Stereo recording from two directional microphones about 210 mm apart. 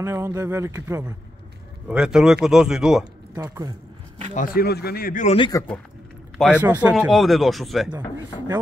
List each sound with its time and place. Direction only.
0.0 s speech: 15° right (ahead or behind)
1.9 s speech: 5° right (ahead or behind)
3.3 s speech: 20° right (ahead or behind)
4.3 s speech: 40° left (ahead or behind)
5.5 s speech: 10° left (ahead or behind)
6.6 s speech: 10° right (ahead or behind)